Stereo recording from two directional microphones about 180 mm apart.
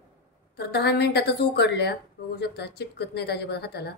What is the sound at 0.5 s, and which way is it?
Speech, 65° left (ahead or behind).